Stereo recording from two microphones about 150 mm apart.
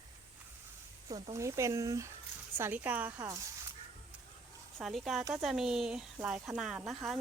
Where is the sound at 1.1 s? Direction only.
20° right (ahead or behind).